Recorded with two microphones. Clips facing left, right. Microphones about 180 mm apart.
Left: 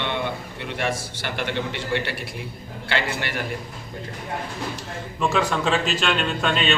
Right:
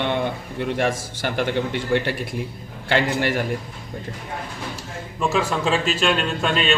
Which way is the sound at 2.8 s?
45° right (ahead or behind).